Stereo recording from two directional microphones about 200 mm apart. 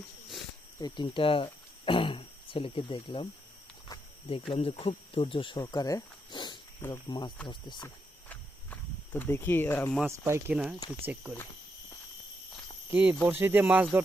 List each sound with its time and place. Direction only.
0.8 s speech: 20° left (ahead or behind)
3.8 s cricket: 25° left (ahead or behind)
4.5 s speech: 25° left (ahead or behind)
8.3 s cricket: 10° left (ahead or behind)
10.0 s speech: 15° right (ahead or behind)
12.9 s speech: 5° right (ahead or behind)